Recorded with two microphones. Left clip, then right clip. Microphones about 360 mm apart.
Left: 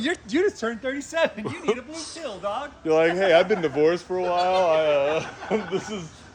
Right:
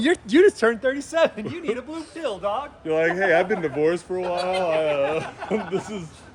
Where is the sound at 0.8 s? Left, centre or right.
Centre.